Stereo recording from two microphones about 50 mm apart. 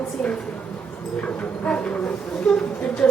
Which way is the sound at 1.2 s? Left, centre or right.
Left.